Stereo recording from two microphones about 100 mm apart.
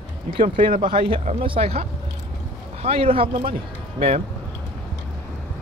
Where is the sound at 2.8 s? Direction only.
85° right; by 3.5 s 65° right (ahead or behind).